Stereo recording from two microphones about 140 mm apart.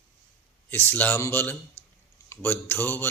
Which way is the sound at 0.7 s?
15° left (ahead or behind).